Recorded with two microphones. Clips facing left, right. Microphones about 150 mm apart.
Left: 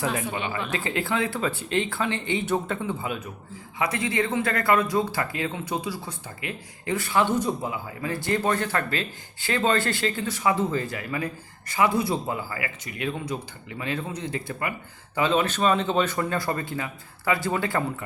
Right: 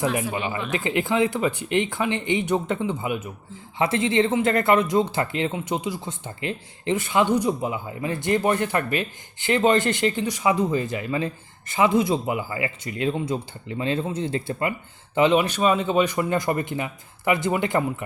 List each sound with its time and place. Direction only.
0.0 s speech: 20° right (ahead or behind)